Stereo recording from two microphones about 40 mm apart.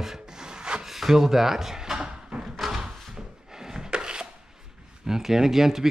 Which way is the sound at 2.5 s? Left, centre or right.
Centre.